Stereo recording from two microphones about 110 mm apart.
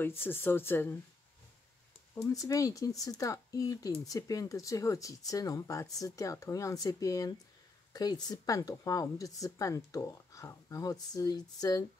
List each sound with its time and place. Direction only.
0.2 s speech: 20° left (ahead or behind)
2.4 s speech: 30° left (ahead or behind)